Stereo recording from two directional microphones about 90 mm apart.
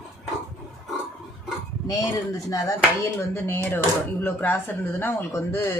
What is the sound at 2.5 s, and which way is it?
A woman's voice, 40° left (ahead or behind).